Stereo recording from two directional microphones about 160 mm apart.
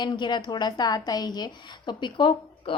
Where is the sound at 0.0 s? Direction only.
30° left (ahead or behind).